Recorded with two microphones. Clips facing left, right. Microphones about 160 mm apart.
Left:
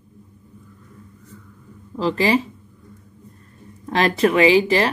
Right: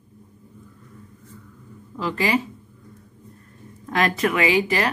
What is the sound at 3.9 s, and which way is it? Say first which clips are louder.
Speech: left 4 dB; 30° left (ahead or behind).